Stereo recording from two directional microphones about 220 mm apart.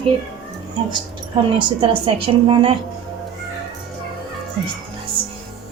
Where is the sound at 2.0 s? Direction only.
20° right (ahead or behind).